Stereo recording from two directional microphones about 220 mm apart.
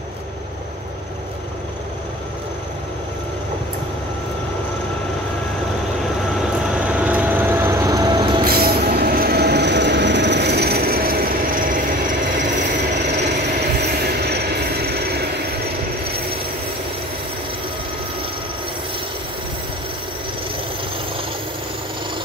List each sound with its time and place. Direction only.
6.4 s vehicle: 5° right (ahead or behind)
8.5 s train: 45° right (ahead or behind)
14.0 s train: 45° right (ahead or behind)